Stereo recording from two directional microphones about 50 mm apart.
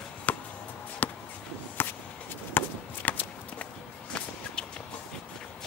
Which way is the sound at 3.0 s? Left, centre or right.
Left.